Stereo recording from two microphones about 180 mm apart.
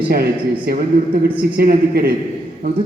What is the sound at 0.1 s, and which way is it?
A woman's voice, 55° right (ahead or behind).